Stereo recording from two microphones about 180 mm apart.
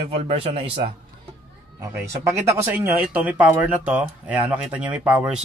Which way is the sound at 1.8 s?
15° right (ahead or behind).